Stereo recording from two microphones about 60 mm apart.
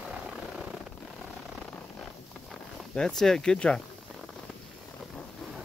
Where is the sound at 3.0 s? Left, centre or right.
Centre.